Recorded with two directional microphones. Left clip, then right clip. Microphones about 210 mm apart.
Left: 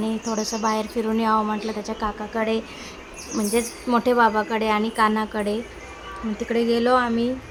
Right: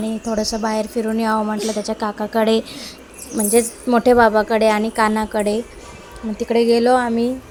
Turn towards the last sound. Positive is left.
turn(degrees=-15)  # may be behind; listen again after turning